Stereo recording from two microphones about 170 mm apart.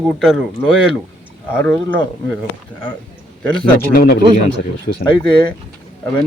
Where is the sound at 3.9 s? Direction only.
60° left (ahead or behind).